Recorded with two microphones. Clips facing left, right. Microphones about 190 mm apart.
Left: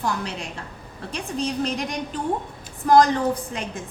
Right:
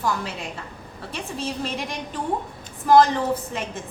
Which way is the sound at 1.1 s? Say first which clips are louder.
Left 3 dB; centre (ahead or behind).